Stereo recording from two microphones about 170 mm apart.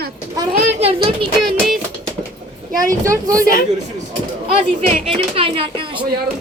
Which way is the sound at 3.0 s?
20° right (ahead or behind).